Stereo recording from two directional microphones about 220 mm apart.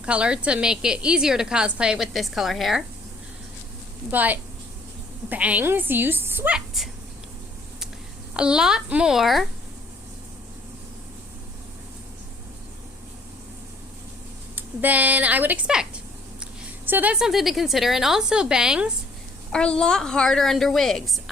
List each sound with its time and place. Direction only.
0.0 s a woman's voice: 5° right (ahead or behind)
4.1 s a woman's voice: 5° right (ahead or behind)
8.3 s a woman's voice: 5° right (ahead or behind)
14.5 s a woman's voice: 10° right (ahead or behind)